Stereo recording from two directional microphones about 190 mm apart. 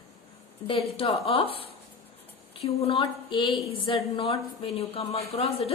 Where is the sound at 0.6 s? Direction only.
30° left (ahead or behind).